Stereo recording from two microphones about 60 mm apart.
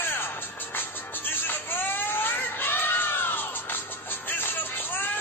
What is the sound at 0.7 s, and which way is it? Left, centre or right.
Music, left.